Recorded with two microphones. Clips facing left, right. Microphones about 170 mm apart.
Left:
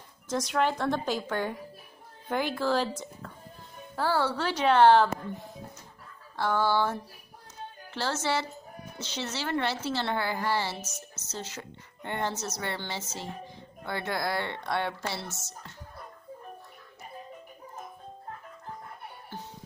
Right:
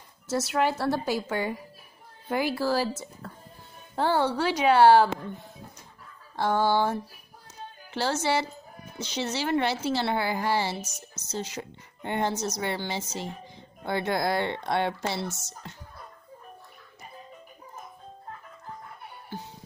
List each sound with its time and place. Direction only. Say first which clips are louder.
0.3 s a woman's voice: right 2 dB; 5° right (ahead or behind)
3.9 s a woman's voice: right 3 dB; 20° right (ahead or behind); by 5.5 s 5° right (ahead or behind)
6.3 s a woman's voice: right 2 dB; 15° right (ahead or behind)